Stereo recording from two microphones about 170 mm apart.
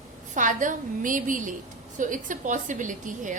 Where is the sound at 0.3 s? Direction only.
50° right (ahead or behind).